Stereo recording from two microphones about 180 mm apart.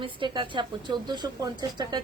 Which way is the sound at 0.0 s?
25° right (ahead or behind).